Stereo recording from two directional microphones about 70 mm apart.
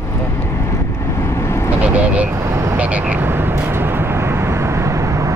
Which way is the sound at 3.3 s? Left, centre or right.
Right.